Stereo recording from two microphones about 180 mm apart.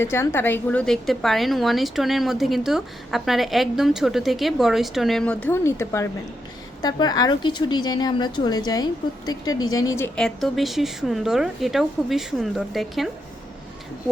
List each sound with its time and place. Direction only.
0.0 s a woman's voice: 15° left (ahead or behind)
10.2 s a woman's voice: centre (ahead or behind)